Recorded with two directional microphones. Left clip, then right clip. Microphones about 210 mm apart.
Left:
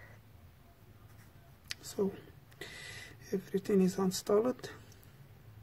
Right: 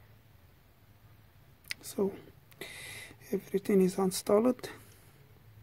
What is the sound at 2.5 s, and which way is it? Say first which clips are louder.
Speech: right 2 dB; 30° right (ahead or behind).